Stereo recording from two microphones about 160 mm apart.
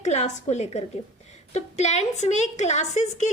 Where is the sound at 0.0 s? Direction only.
45° left (ahead or behind).